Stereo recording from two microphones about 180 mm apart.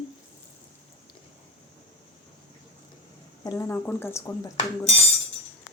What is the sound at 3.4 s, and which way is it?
Speech, 15° left (ahead or behind).